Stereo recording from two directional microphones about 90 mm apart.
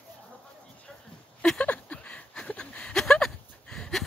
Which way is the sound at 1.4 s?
15° left (ahead or behind).